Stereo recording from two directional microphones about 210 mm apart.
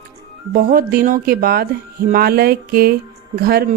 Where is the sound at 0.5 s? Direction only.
45° right (ahead or behind).